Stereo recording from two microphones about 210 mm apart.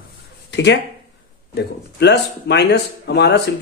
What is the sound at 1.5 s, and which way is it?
Speech, 50° left (ahead or behind).